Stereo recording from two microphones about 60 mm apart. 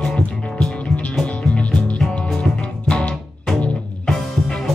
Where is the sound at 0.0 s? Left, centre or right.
Centre.